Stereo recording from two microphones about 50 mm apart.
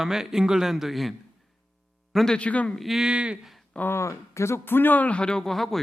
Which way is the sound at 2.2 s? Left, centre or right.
Left.